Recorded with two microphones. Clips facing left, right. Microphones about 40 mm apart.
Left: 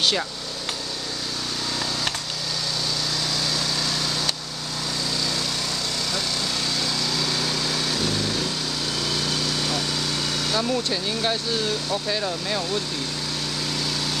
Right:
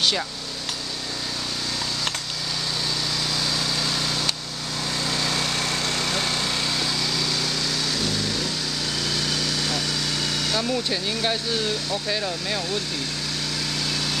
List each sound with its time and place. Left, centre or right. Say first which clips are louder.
5.1 s lawn mower: right 3 dB; right
6.8 s vehicle: even; centre
9.6 s vehicle: even; centre
10.5 s speech: left 2 dB; centre